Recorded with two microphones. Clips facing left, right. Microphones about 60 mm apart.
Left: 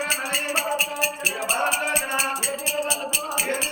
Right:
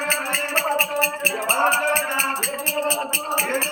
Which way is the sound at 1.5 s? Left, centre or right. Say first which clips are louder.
Right 5 dB; right.